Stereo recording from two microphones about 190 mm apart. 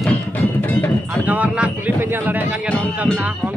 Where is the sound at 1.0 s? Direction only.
10° right (ahead or behind).